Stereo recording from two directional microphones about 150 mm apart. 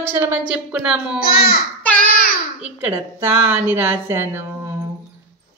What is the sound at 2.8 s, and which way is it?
A woman's voice, 15° right (ahead or behind).